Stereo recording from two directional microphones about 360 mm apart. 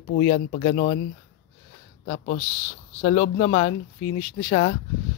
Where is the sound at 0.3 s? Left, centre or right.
Centre.